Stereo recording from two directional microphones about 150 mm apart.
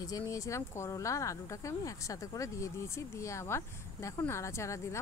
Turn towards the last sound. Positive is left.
turn(degrees=20)  # may be behind; listen again after turning